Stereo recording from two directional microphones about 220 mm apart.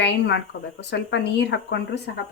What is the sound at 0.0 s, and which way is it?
A woman's voice, 50° left (ahead or behind).